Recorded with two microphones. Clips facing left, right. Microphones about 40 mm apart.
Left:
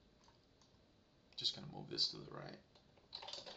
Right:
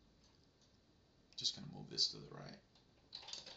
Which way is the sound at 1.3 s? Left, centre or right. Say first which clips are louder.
Left 1 dB; left.